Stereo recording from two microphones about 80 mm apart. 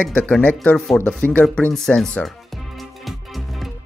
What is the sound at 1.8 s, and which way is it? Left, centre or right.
Speech, centre.